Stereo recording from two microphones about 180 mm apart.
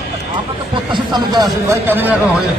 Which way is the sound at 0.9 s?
25° right (ahead or behind).